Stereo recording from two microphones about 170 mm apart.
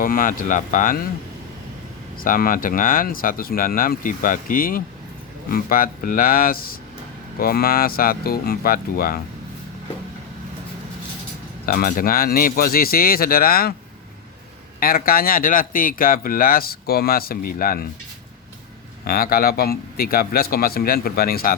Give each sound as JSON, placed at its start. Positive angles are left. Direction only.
{"t": 0.0, "sound": "speech", "side_deg": 55}
{"t": 2.2, "sound": "a man's voice", "side_deg": 55}
{"t": 11.6, "sound": "a man's voice", "side_deg": 60}
{"t": 14.8, "sound": "a man's voice", "side_deg": 60}
{"t": 19.0, "sound": "a man's voice", "side_deg": 60}